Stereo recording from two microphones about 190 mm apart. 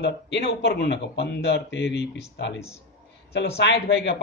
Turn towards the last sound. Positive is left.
turn(degrees=60)  # may be behind; listen again after turning